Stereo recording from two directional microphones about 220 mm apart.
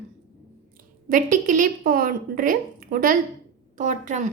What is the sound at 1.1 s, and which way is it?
A woman's voice, 35° right (ahead or behind).